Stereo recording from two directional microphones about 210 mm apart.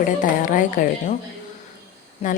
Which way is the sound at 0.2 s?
40° left (ahead or behind).